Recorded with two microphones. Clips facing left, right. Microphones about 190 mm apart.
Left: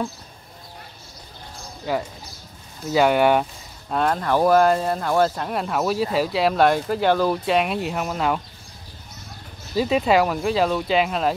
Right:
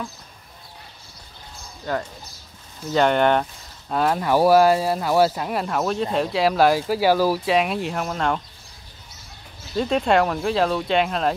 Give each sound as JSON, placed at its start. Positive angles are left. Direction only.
{"t": 1.9, "sound": "speech", "side_deg": 10}
{"t": 3.9, "sound": "speech", "side_deg": -5}
{"t": 9.8, "sound": "speech", "side_deg": 5}